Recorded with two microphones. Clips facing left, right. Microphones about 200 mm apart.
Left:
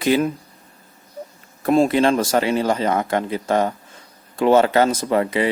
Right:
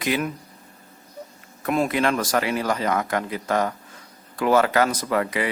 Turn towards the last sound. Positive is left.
turn(degrees=25)  # may be behind; listen again after turning